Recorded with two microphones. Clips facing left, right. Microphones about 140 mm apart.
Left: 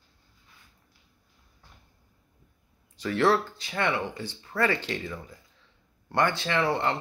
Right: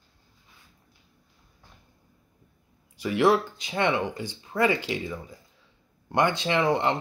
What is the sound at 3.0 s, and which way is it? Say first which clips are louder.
Speech: right 2 dB; 10° right (ahead or behind).